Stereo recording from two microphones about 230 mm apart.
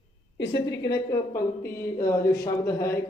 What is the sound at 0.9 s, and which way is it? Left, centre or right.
Speech, centre.